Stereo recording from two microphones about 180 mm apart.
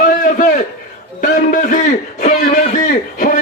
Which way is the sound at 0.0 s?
50° left (ahead or behind).